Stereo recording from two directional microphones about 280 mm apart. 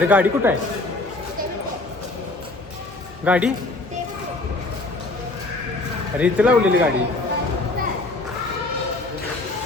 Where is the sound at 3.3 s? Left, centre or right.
Centre.